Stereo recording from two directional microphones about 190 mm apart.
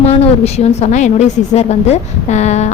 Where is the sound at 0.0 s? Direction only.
35° left (ahead or behind).